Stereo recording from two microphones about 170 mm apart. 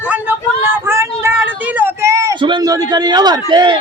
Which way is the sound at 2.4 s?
25° right (ahead or behind).